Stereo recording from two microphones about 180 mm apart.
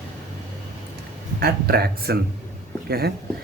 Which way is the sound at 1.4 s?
60° right (ahead or behind).